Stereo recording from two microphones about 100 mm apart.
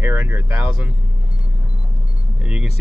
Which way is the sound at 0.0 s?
15° right (ahead or behind).